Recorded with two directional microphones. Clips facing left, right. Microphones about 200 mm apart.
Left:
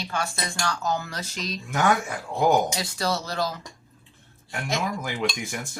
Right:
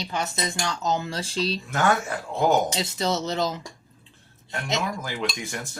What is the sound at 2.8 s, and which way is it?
Speech, 20° right (ahead or behind).